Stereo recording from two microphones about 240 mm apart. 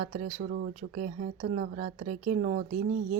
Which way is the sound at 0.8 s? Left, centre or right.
Right.